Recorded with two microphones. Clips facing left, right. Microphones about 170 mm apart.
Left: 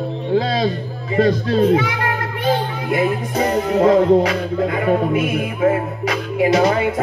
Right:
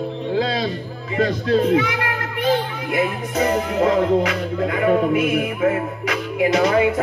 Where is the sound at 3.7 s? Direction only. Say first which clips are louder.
Left 6 dB; 30° left (ahead or behind).